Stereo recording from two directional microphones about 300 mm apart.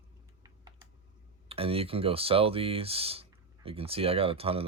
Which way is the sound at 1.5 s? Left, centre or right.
Centre.